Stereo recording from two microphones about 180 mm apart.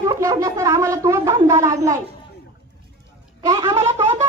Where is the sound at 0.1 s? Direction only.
20° right (ahead or behind).